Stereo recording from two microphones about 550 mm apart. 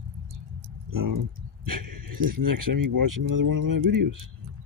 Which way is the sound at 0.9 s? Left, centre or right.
Right.